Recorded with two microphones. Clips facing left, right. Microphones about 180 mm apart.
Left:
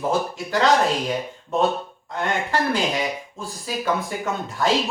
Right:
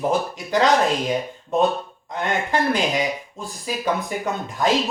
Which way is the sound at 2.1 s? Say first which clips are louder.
Right 1 dB; 15° right (ahead or behind).